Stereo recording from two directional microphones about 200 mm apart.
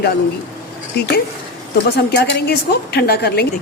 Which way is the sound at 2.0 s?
55° left (ahead or behind).